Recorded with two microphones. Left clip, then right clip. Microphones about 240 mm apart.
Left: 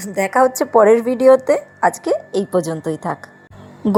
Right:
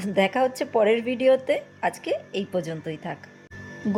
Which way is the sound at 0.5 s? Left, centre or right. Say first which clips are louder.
Left 10 dB; centre.